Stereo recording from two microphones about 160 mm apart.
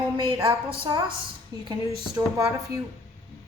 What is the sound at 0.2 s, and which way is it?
A woman's voice, 35° right (ahead or behind).